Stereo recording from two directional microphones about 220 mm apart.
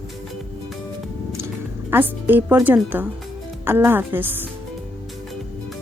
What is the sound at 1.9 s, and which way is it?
A woman's voice, 10° right (ahead or behind).